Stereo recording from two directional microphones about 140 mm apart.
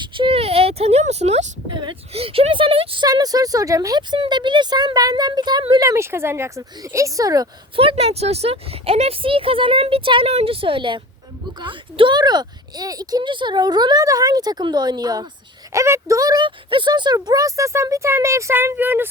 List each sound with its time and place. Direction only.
0.0 s speech: 35° right (ahead or behind); by 1.5 s 55° right (ahead or behind)
1.7 s a woman's voice: 35° right (ahead or behind)
7.8 s a woman's voice: 45° right (ahead or behind); by 19.0 s 15° right (ahead or behind)